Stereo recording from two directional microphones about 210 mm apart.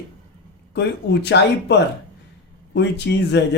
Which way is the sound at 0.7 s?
55° left (ahead or behind).